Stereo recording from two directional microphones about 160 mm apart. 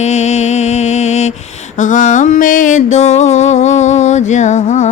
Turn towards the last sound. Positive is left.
turn(degrees=50)  # may be behind; listen again after turning